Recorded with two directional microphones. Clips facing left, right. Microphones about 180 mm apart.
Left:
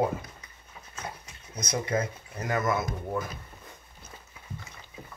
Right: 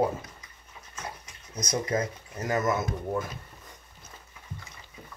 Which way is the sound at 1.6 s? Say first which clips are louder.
Right 1 dB; 35° right (ahead or behind).